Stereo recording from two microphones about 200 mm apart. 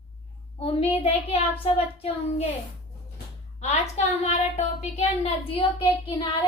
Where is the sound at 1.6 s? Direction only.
30° left (ahead or behind).